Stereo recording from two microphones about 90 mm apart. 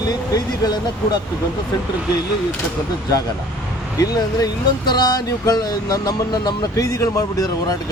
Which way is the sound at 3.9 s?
40° left (ahead or behind).